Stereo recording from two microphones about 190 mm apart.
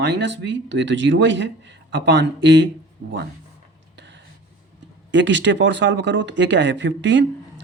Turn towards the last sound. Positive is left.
turn(degrees=-70)  # may be behind; listen again after turning